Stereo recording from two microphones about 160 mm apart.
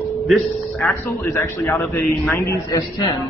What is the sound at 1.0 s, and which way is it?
A man's voice, 20° left (ahead or behind).